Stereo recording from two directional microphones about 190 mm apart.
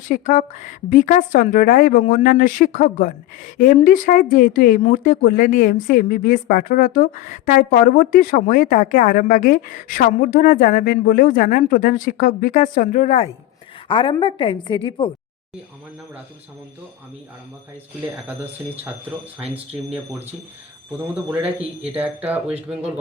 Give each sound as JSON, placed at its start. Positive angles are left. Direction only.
{"t": 0.1, "sound": "a woman's voice", "side_deg": 45}
{"t": 19.4, "sound": "speech", "side_deg": -5}
{"t": 21.9, "sound": "speech", "side_deg": -10}